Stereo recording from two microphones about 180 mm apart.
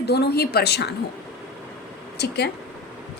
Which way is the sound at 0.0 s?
65° left (ahead or behind).